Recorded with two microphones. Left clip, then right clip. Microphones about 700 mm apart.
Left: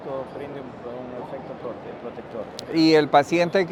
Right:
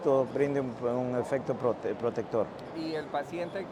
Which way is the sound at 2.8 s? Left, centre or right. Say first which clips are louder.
Left 17 dB; left.